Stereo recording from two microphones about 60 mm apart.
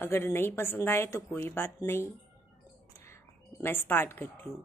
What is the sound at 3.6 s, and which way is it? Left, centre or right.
Speech, left.